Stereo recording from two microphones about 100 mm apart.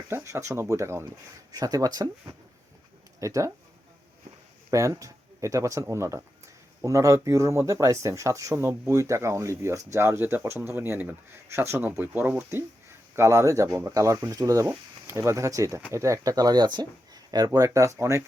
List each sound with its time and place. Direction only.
0.1 s speech: 25° right (ahead or behind)
1.5 s speech: 35° right (ahead or behind)
4.7 s speech: 35° right (ahead or behind)